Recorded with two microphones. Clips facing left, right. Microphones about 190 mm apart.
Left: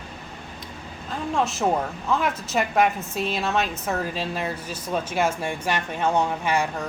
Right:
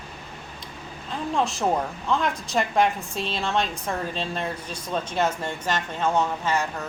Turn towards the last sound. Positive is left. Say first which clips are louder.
# left 2 dB
turn(degrees=15)  # may be behind; listen again after turning